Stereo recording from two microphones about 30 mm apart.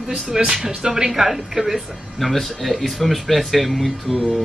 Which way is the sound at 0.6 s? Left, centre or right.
Right.